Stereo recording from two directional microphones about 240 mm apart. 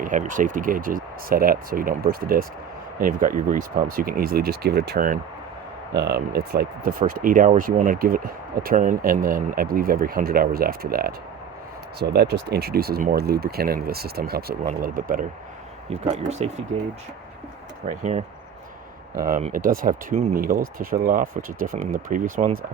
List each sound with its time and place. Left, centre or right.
0.0 s speech: right
17.8 s speech: right